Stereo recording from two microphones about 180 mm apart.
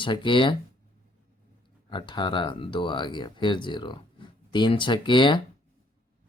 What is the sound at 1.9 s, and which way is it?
Speech, 25° left (ahead or behind).